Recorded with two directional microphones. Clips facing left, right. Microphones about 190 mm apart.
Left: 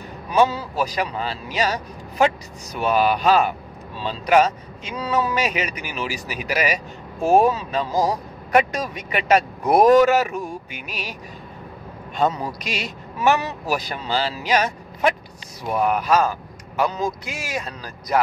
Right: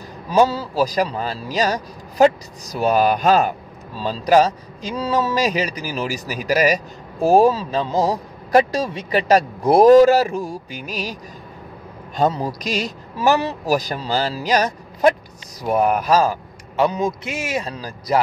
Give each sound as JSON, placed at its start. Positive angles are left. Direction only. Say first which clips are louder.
{"t": 0.3, "sound": "speech", "louder": "right 2 dB", "side_deg": -30}
{"t": 12.2, "sound": "speech", "louder": "right 2 dB", "side_deg": -40}
{"t": 16.9, "sound": "a man's voice", "louder": "right 3 dB", "side_deg": -20}